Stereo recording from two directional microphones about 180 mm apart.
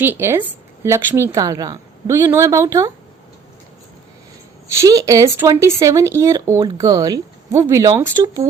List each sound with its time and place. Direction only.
0.0 s speech: 10° right (ahead or behind)
4.7 s speech: 15° right (ahead or behind)